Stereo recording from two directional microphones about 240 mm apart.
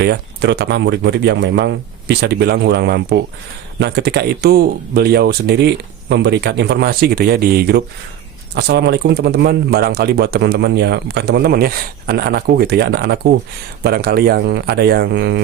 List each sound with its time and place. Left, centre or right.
0.0 s speech: right